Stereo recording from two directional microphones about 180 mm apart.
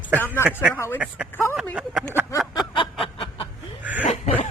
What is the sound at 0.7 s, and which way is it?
Speech, 15° left (ahead or behind).